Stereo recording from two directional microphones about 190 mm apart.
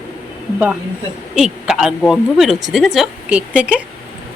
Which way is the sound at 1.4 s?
5° right (ahead or behind).